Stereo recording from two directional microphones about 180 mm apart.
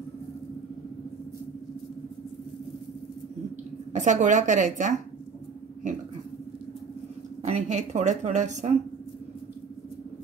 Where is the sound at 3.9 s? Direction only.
45° right (ahead or behind).